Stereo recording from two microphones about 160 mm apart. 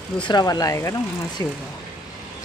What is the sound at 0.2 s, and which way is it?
Speech, 25° left (ahead or behind).